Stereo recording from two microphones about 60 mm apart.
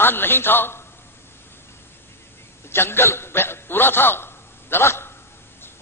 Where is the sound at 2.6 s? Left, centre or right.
Left.